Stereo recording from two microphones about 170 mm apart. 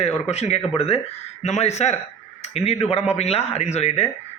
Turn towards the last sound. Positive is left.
turn(degrees=40)  # may be behind; listen again after turning